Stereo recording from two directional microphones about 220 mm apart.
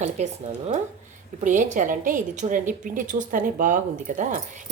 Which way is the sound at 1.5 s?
35° right (ahead or behind).